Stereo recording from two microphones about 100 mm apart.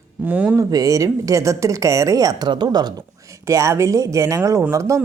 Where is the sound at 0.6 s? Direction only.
35° right (ahead or behind).